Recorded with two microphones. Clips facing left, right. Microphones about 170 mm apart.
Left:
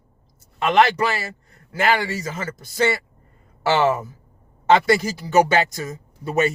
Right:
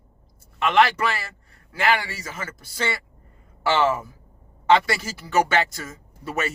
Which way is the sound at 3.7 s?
40° left (ahead or behind).